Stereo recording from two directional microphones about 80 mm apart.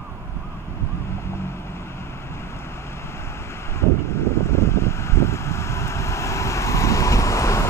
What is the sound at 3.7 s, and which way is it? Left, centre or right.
Vehicle, left.